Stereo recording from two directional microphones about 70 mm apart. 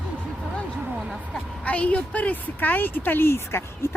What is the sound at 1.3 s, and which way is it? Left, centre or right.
A woman's voice, centre.